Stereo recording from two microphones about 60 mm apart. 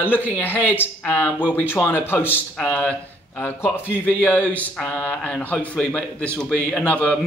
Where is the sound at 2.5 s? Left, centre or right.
Left.